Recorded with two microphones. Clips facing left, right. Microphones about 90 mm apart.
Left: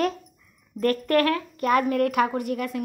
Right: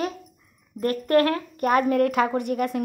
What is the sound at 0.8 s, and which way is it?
A woman's voice, 25° right (ahead or behind).